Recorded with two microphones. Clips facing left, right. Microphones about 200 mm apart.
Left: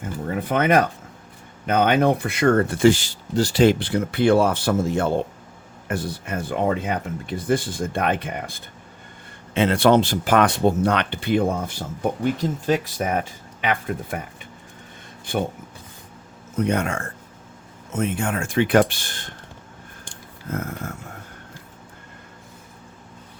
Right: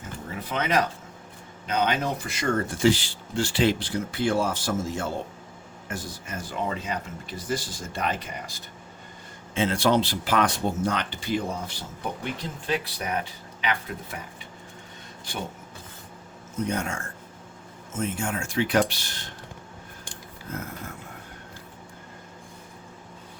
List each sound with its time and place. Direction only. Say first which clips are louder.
0.3 s speech: left 8 dB; 55° left (ahead or behind)
10.6 s speech: left 7 dB; 65° left (ahead or behind)
15.2 s speech: left 10 dB; 55° left (ahead or behind)
16.6 s speech: left 6 dB; 65° left (ahead or behind)